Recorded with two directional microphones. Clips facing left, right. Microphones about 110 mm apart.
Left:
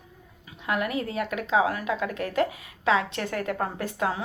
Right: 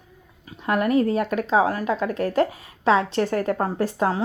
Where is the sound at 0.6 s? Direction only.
40° right (ahead or behind).